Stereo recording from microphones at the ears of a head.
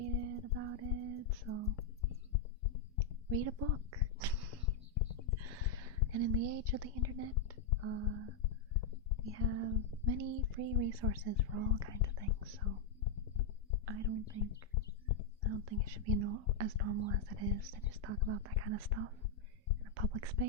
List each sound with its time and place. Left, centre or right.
0.0 s music: right
2.0 s heart murmur: left
3.2 s speech: right
4.6 s a sound: left
5.4 s a sound: right
6.1 s speech: right
8.4 s a sound: left
9.3 s speech: right
13.8 s speech: right
14.5 s a sound: left
15.4 s speech: right
19.8 s whispering: right